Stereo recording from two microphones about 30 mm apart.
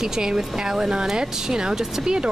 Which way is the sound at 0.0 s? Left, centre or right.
Right.